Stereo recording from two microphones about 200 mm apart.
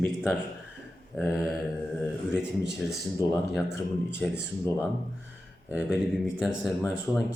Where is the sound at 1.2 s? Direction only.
Centre (ahead or behind).